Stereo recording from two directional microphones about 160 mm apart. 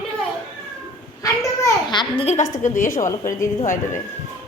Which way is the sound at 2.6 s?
50° left (ahead or behind).